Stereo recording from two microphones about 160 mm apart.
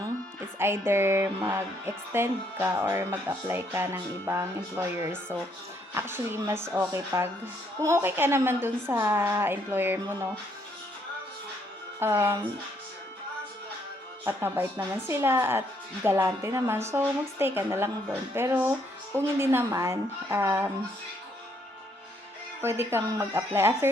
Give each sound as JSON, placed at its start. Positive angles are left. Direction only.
{"t": 0.6, "sound": "music", "side_deg": -15}
{"t": 11.9, "sound": "music", "side_deg": -15}
{"t": 14.3, "sound": "music", "side_deg": -15}
{"t": 22.6, "sound": "music", "side_deg": -15}